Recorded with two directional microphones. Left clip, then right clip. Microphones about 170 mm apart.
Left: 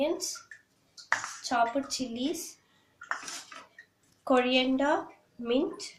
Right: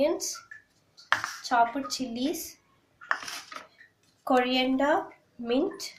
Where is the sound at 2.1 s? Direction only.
Centre (ahead or behind).